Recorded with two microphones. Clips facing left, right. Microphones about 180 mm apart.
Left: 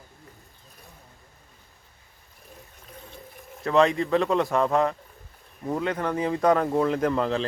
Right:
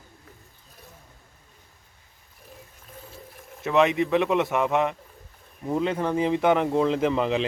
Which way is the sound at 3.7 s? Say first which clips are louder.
Even; 20° right (ahead or behind).